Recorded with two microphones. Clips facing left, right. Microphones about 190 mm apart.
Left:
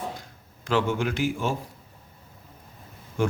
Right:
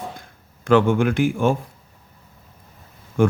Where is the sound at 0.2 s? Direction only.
55° right (ahead or behind).